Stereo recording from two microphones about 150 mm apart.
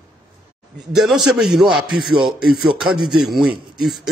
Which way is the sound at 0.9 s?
Centre (ahead or behind).